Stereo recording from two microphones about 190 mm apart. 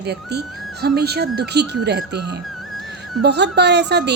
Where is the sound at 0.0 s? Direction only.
60° right (ahead or behind).